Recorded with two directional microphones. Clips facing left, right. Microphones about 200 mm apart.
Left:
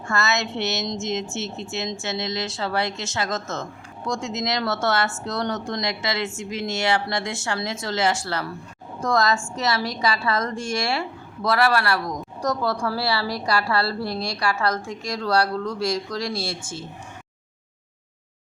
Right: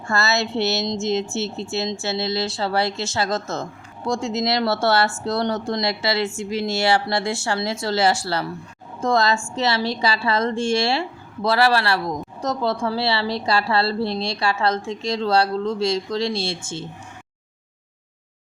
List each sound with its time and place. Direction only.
0.1 s a woman's voice: 35° right (ahead or behind)